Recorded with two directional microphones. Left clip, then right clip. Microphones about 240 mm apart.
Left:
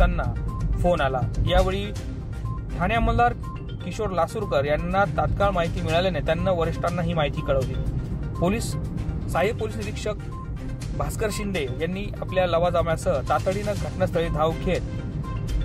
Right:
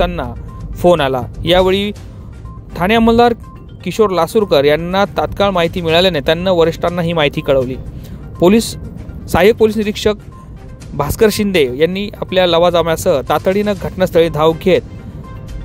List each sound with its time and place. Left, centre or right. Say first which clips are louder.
0.0 s speech: right 9 dB; right